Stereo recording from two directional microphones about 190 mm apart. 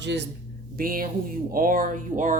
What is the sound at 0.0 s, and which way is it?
Speech, 65° right (ahead or behind).